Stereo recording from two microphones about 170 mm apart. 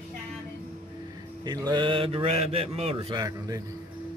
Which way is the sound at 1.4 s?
25° right (ahead or behind).